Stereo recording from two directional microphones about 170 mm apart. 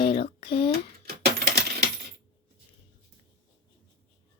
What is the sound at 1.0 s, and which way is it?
Coin, 70° right (ahead or behind).